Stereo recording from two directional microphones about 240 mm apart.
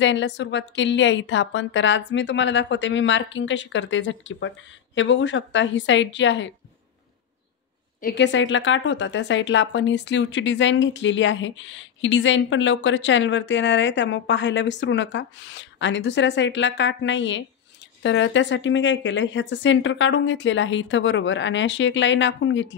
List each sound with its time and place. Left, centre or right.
0.0 s a woman's voice: left
8.0 s a woman's voice: left